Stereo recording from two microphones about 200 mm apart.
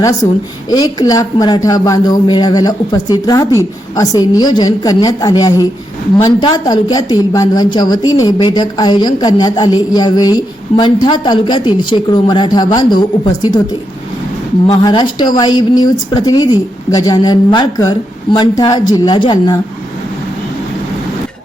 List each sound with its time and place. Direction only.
0.2 s a woman's voice: 15° left (ahead or behind)